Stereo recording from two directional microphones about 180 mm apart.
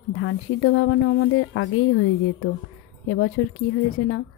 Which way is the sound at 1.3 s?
90° left.